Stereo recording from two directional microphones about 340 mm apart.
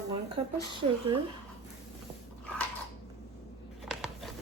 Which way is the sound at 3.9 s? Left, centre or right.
Centre.